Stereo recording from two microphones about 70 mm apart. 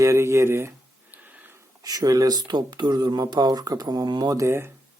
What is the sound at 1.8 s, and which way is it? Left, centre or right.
Speech, right.